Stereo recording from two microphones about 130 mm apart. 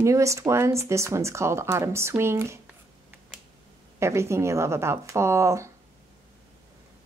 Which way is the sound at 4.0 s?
20° right (ahead or behind).